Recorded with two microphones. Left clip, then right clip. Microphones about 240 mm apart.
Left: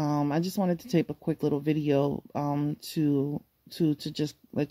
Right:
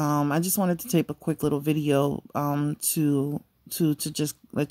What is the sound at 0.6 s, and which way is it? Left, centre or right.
Speech, centre.